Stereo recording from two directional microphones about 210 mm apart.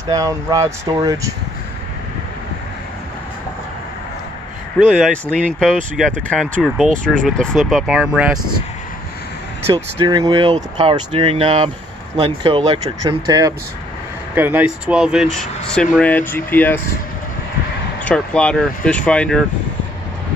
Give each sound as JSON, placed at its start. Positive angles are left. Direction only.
{"t": 0.1, "sound": "speech", "side_deg": -15}
{"t": 4.7, "sound": "speech", "side_deg": 0}
{"t": 10.0, "sound": "speech", "side_deg": -20}
{"t": 18.0, "sound": "speech", "side_deg": 5}